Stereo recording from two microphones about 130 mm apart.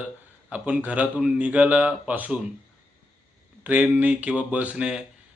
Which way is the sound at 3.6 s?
10° right (ahead or behind).